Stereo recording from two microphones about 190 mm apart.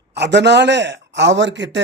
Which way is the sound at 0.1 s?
65° right (ahead or behind).